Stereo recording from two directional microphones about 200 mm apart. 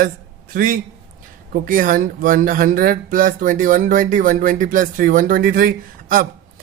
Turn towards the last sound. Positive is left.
turn(degrees=-45)  # may be behind; listen again after turning